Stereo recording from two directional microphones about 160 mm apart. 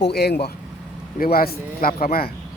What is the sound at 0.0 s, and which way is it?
Speech, 90° left.